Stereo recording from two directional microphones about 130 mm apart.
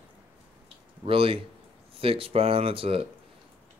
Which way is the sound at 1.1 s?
45° right (ahead or behind).